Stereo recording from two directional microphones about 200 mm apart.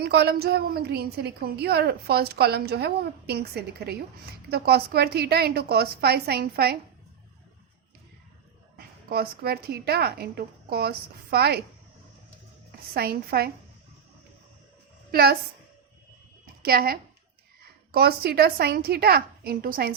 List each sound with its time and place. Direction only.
0.0 s a woman's voice: 55° right (ahead or behind)
8.7 s a woman's voice: 50° right (ahead or behind)
12.9 s a woman's voice: 50° right (ahead or behind)
15.1 s a woman's voice: 50° right (ahead or behind)
16.6 s a woman's voice: 50° right (ahead or behind)